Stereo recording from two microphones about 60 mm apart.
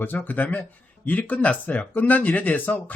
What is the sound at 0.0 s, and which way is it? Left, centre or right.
Speech, left.